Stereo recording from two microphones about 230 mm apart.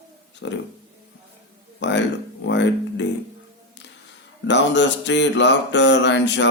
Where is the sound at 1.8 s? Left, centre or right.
Left.